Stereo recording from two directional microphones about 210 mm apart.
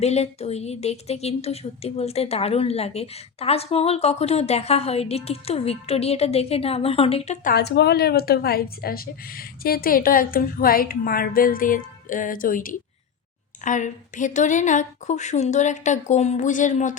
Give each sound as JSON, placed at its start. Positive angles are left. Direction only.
{"t": 0.0, "sound": "a woman's voice", "side_deg": 30}
{"t": 7.4, "sound": "speech", "side_deg": 50}